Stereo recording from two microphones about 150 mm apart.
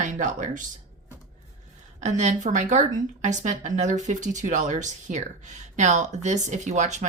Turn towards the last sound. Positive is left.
turn(degrees=-50)  # may be behind; listen again after turning